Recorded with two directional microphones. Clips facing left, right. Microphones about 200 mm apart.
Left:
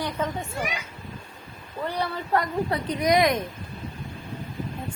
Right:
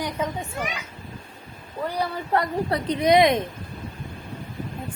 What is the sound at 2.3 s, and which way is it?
A woman's voice, 35° right (ahead or behind).